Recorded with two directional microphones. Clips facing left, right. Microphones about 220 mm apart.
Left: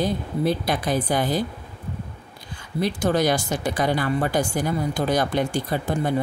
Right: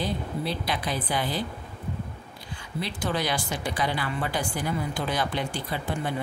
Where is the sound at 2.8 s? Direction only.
45° left (ahead or behind).